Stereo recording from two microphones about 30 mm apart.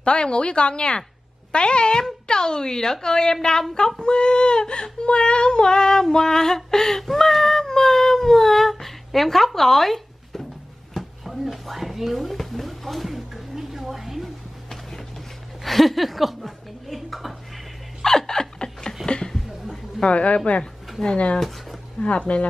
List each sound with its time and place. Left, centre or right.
0.0 s a woman's voice: left
2.2 s child singing: left
7.1 s cat: centre
11.0 s drawer open or close: centre
12.4 s a sound: centre
14.7 s a sound: centre
18.0 s a sound: centre
20.1 s speech: left
21.4 s speech: centre
22.0 s speech: left